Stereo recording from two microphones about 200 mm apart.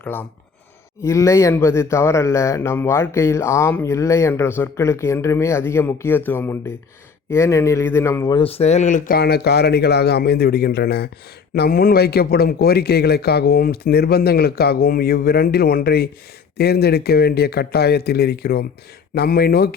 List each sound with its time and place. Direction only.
0.0 s speech: 10° left (ahead or behind)
8.4 s a man's voice: 30° left (ahead or behind); by 19.7 s 50° left (ahead or behind)